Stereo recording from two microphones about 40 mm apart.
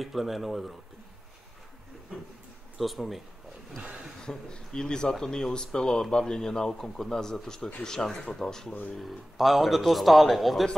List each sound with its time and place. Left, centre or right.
0.0 s a man's voice: centre
2.8 s a man's voice: centre
4.2 s speech: centre
8.9 s a man's voice: centre